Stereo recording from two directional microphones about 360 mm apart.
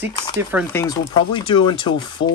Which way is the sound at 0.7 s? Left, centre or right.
Centre.